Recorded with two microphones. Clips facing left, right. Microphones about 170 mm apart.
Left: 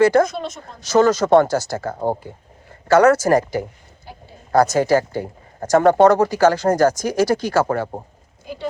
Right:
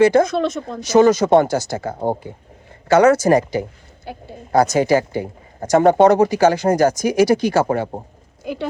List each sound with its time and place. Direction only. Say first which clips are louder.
0.0 s speech: right 1 dB; 20° right (ahead or behind)
0.3 s speech: right 8 dB; 70° right (ahead or behind)
0.8 s speech: right 2 dB; 15° right (ahead or behind)
4.1 s a woman's voice: right 7 dB; 65° right (ahead or behind)
4.5 s speech: even; 15° right (ahead or behind)